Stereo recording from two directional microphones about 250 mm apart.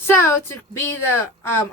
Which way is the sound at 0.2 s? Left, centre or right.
Centre.